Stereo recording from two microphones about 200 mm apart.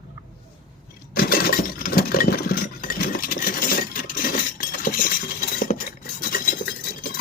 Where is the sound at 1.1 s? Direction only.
45° left (ahead or behind).